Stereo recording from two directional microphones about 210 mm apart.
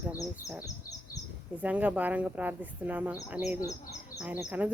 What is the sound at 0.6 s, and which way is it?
Bird, 15° left (ahead or behind).